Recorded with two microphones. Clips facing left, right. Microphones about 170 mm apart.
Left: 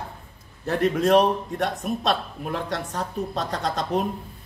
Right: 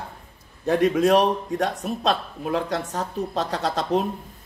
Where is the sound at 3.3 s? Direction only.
35° right (ahead or behind).